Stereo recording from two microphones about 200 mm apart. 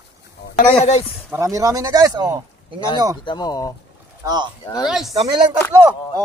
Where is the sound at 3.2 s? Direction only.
20° left (ahead or behind).